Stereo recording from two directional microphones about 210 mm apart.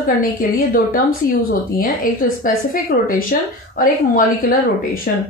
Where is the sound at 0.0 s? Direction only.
40° left (ahead or behind).